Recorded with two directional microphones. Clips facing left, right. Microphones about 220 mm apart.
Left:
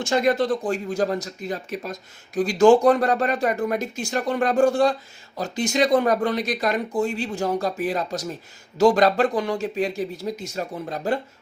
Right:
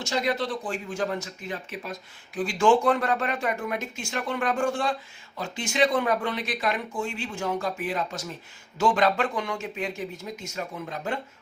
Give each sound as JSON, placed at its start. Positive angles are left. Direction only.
{"t": 0.0, "sound": "speech", "side_deg": 50}